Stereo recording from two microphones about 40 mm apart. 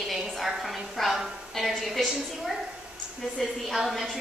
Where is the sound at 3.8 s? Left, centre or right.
Centre.